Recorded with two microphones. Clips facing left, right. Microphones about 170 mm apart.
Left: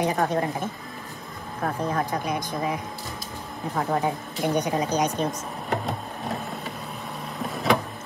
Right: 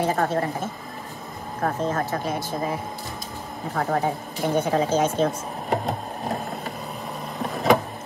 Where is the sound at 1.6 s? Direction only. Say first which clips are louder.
Right 2 dB; 45° right (ahead or behind).